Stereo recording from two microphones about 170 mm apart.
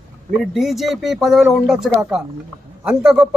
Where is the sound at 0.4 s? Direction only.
Centre (ahead or behind).